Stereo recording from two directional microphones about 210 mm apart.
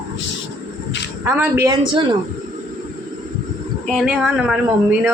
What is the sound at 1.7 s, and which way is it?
Speech, 20° right (ahead or behind).